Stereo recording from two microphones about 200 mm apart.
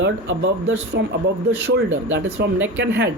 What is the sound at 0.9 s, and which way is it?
Speech, 60° right (ahead or behind).